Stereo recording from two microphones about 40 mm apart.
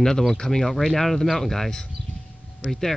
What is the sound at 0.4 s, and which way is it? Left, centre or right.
Speech, centre.